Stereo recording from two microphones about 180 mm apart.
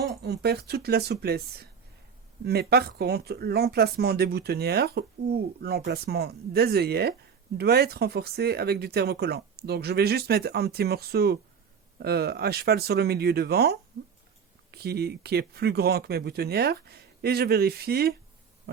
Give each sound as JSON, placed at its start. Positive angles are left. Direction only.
{"t": 0.2, "sound": "speech", "side_deg": -65}